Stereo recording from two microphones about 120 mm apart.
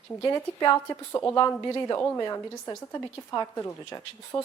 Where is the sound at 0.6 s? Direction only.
25° left (ahead or behind).